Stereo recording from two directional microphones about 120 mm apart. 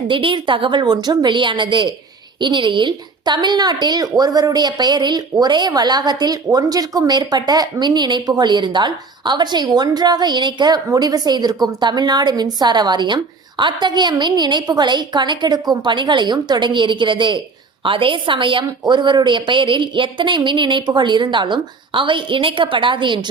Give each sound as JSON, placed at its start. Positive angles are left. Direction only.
{"t": 0.1, "sound": "a woman's voice", "side_deg": -45}